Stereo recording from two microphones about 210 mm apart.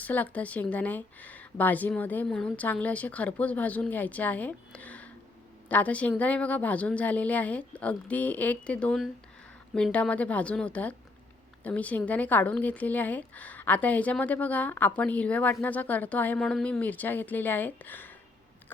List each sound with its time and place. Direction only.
0.0 s a woman's voice: 5° left (ahead or behind)